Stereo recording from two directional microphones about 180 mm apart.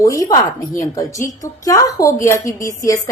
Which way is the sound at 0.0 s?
20° left (ahead or behind).